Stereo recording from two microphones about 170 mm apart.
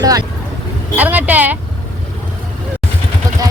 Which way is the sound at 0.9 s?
10° right (ahead or behind).